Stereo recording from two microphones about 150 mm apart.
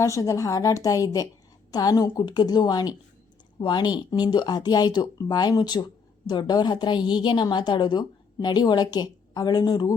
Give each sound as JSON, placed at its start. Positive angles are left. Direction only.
{"t": 0.0, "sound": "a woman's voice", "side_deg": 20}